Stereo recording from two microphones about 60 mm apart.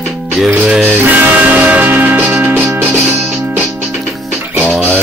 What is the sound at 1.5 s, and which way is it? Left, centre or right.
Music, right.